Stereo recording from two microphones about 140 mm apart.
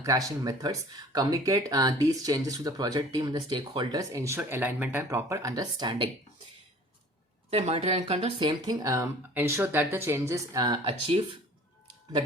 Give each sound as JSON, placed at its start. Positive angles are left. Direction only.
{"t": 0.0, "sound": "speech", "side_deg": -25}
{"t": 4.1, "sound": "speech", "side_deg": -20}
{"t": 7.5, "sound": "a woman's voice", "side_deg": -50}
{"t": 8.4, "sound": "speech", "side_deg": -30}